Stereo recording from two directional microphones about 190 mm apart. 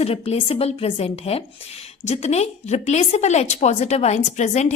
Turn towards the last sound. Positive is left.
turn(degrees=35)  # may be behind; listen again after turning